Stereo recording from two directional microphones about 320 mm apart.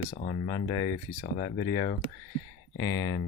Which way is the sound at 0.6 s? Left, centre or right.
Centre.